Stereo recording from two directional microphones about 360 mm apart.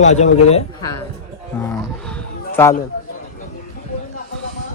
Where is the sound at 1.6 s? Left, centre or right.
Centre.